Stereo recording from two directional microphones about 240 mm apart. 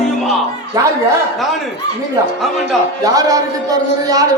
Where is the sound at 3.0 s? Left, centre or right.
Centre.